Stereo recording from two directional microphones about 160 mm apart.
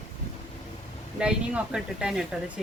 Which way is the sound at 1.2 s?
5° right (ahead or behind).